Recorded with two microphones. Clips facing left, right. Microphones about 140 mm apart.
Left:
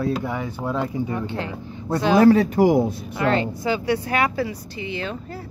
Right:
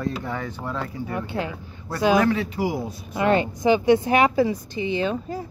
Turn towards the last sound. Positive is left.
turn(degrees=-15)  # may be behind; listen again after turning